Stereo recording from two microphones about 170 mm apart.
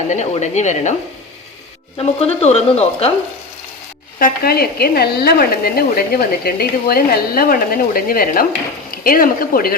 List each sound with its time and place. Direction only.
0.1 s speech: 45° left (ahead or behind)
2.0 s speech: 35° left (ahead or behind)
4.2 s a woman's voice: 65° left (ahead or behind)